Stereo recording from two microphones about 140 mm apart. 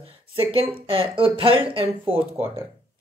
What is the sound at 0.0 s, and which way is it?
Speech, 40° right (ahead or behind).